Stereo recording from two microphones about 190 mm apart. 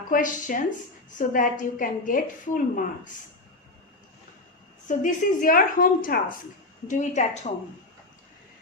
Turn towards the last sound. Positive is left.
turn(degrees=35)  # may be behind; listen again after turning